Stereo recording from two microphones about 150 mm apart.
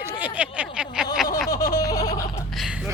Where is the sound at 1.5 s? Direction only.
25° left (ahead or behind).